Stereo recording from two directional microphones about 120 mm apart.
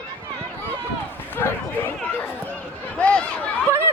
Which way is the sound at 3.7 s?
20° right (ahead or behind).